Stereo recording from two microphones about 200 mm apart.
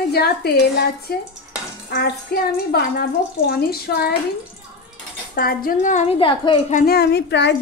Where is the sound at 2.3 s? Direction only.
50° left (ahead or behind).